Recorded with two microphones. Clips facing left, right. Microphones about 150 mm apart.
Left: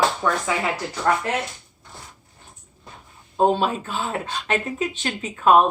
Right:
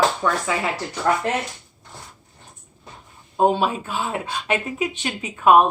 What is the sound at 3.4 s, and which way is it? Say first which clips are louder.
Speech: right 1 dB; 10° right (ahead or behind).